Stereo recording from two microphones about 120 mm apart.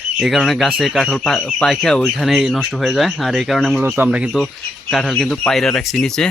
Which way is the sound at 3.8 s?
15° right (ahead or behind).